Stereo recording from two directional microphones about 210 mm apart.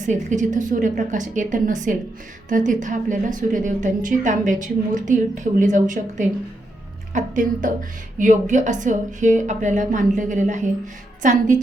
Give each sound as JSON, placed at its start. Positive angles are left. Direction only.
{"t": 0.0, "sound": "a woman's voice", "side_deg": -35}